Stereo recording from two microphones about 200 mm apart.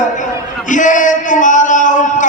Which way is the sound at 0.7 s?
40° left (ahead or behind).